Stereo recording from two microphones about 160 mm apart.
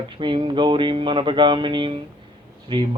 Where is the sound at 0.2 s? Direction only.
30° right (ahead or behind).